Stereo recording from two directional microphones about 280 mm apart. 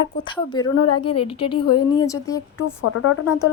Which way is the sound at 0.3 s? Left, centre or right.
Centre.